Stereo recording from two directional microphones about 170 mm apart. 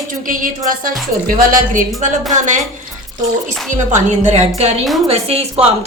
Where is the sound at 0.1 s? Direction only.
50° right (ahead or behind).